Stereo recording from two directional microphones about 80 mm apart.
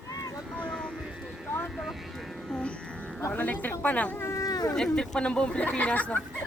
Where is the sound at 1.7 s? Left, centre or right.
Centre.